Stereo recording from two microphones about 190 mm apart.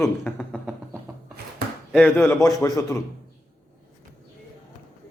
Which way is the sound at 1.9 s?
5° left (ahead or behind).